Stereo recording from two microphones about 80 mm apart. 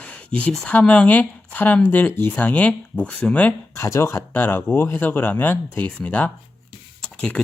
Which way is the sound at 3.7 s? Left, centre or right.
Left.